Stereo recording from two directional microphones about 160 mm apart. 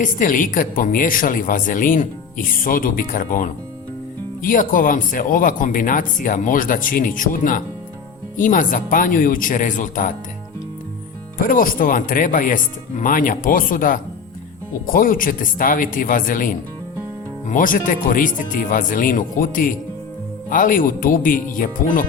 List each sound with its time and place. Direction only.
0.0 s a woman's voice: 55° left (ahead or behind)
11.3 s a woman's voice: 60° left (ahead or behind)